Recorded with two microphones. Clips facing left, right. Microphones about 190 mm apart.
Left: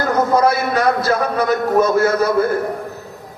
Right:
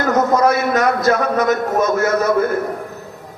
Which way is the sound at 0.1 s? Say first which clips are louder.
Right 1 dB; 30° left (ahead or behind).